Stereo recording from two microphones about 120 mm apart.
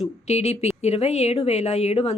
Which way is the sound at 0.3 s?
65° left (ahead or behind).